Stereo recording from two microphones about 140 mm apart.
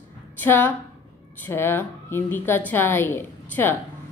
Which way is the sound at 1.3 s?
15° left (ahead or behind).